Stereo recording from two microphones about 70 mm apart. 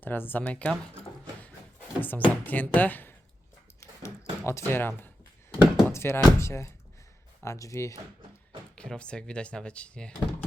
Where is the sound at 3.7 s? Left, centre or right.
Left.